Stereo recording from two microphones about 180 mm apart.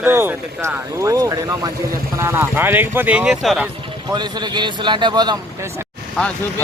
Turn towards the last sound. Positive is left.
turn(degrees=0)  # may be behind; listen again after turning